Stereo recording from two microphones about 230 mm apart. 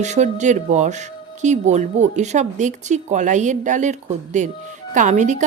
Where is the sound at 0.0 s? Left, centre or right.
Right.